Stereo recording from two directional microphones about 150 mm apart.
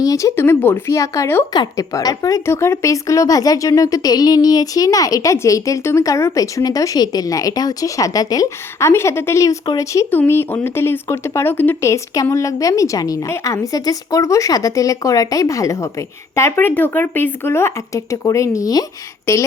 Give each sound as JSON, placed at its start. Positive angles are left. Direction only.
{"t": 0.0, "sound": "a woman's voice", "side_deg": 20}